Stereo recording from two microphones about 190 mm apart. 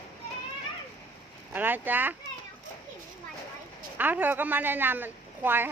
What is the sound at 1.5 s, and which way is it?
Speech, 10° right (ahead or behind).